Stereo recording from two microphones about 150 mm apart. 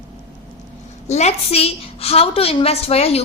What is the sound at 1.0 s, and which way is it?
A woman's voice, 50° left (ahead or behind).